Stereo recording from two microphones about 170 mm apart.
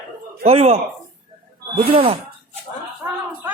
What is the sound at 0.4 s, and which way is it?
Speech, 35° right (ahead or behind).